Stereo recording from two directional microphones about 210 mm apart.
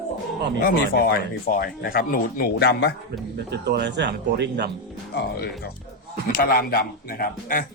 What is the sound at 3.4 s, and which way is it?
Speech, 50° right (ahead or behind).